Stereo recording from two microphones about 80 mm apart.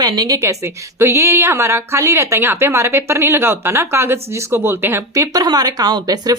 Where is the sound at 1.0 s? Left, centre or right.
Right.